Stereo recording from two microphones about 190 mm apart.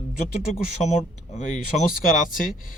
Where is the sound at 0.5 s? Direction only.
35° left (ahead or behind).